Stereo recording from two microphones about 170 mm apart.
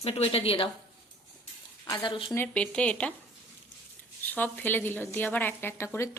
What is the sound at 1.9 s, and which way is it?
Speech, 30° left (ahead or behind).